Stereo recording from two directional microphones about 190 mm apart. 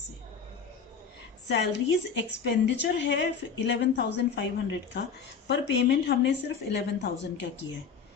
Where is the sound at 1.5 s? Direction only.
65° left (ahead or behind).